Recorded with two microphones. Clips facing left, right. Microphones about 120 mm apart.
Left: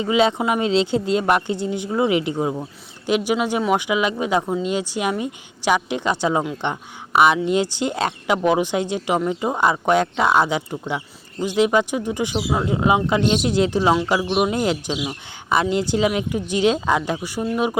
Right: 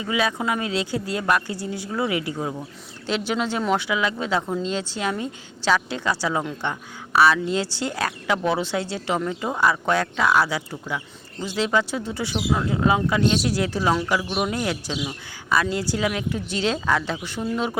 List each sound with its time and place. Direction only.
0.0 s speech: 25° left (ahead or behind)